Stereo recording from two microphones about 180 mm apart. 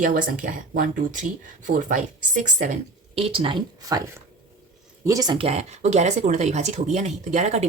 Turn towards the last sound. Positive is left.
turn(degrees=-40)  # may be behind; listen again after turning